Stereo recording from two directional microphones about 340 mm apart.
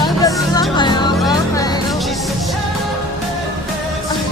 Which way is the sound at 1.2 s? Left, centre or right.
Centre.